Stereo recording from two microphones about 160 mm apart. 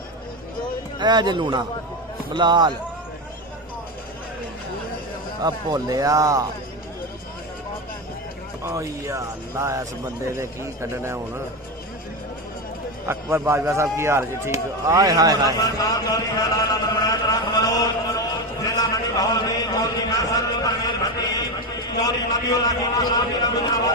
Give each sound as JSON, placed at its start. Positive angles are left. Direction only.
{"t": 0.9, "sound": "speech", "side_deg": -30}
{"t": 5.4, "sound": "speech", "side_deg": -25}
{"t": 8.6, "sound": "speech", "side_deg": -20}
{"t": 13.1, "sound": "speech", "side_deg": -15}
{"t": 15.6, "sound": "a man's voice", "side_deg": 25}
{"t": 17.1, "sound": "a sound", "side_deg": 20}
{"t": 22.0, "sound": "a man's voice", "side_deg": 25}